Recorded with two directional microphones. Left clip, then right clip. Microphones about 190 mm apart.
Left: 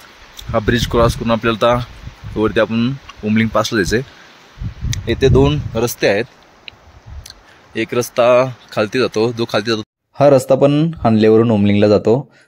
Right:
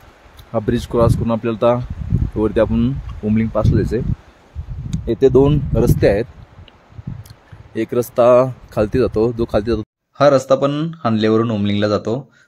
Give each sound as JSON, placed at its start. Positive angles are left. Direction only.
{"t": 0.5, "sound": "speech", "side_deg": 0}
{"t": 3.5, "sound": "speech", "side_deg": 0}
{"t": 4.9, "sound": "speech", "side_deg": -15}
{"t": 10.1, "sound": "a man's voice", "side_deg": 30}